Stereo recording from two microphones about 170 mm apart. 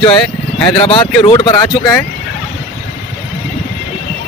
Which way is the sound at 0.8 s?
30° left (ahead or behind).